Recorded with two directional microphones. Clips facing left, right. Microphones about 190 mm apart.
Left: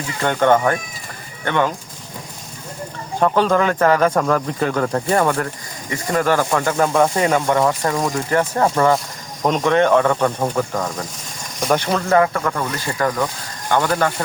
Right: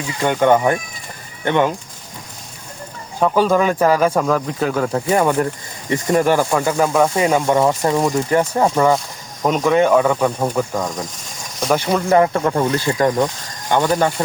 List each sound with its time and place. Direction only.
0.2 s speech: 10° right (ahead or behind)
3.2 s speech: 5° right (ahead or behind)